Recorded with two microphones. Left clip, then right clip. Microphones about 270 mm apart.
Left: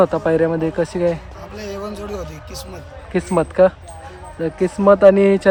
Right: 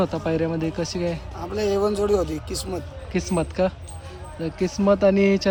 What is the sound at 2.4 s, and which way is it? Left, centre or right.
Speech, centre.